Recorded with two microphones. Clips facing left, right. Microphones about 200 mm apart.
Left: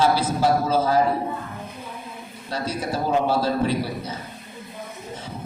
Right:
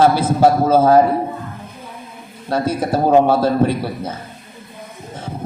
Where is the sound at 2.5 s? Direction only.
55° right (ahead or behind).